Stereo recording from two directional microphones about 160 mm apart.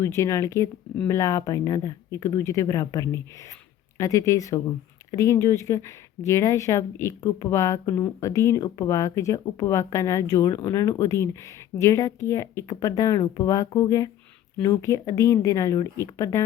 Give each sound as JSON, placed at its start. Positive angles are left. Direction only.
{"t": 0.0, "sound": "speech", "side_deg": 20}